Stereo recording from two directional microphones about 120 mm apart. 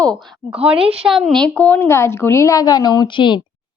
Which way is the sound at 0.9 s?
5° right (ahead or behind).